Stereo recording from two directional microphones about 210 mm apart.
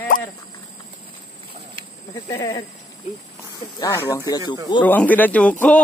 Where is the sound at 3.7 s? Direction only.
15° left (ahead or behind).